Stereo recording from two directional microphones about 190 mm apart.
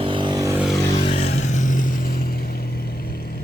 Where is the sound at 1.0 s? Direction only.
30° left (ahead or behind); by 2.4 s 50° left (ahead or behind).